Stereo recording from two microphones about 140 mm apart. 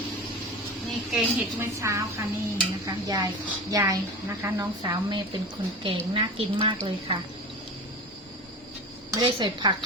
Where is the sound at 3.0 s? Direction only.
25° right (ahead or behind).